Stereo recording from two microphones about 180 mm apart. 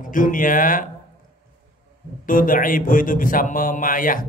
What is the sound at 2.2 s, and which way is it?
Speech, 50° left (ahead or behind).